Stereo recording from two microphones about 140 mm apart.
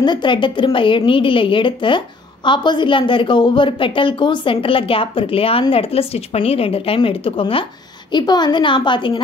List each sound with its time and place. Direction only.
0.0 s a woman's voice: 35° left (ahead or behind)